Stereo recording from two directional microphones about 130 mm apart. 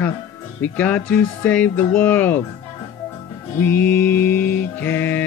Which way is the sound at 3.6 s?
15° left (ahead or behind).